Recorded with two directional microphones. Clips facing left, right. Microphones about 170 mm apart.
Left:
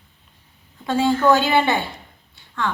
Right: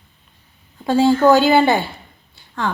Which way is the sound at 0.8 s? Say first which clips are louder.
Right 5 dB; 35° right (ahead or behind).